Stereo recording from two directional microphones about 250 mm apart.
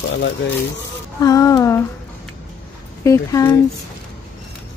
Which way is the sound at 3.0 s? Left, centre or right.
Centre.